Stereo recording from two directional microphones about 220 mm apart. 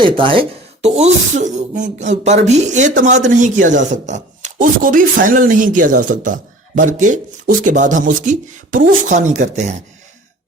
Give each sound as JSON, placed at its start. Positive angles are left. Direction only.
{"t": 0.0, "sound": "speech", "side_deg": -25}